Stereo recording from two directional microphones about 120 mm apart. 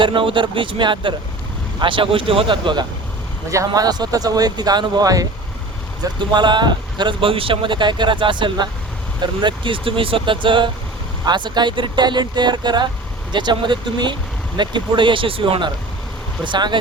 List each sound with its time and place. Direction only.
0.0 s speech: 45° right (ahead or behind)
3.5 s speech: 30° right (ahead or behind)